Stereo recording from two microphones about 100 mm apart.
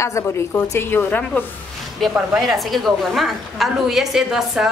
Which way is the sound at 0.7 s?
20° left (ahead or behind).